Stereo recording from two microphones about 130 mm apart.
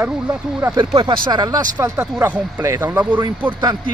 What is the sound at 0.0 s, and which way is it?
Speech, 15° right (ahead or behind).